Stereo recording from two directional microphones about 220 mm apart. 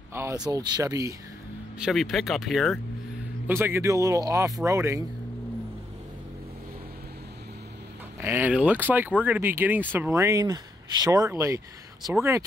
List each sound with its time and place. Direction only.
0.1 s speech: 15° right (ahead or behind)
1.8 s speech: centre (ahead or behind)
3.4 s speech: 10° right (ahead or behind)
8.2 s speech: 10° right (ahead or behind)